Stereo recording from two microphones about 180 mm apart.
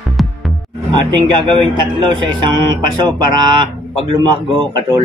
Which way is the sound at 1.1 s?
25° right (ahead or behind).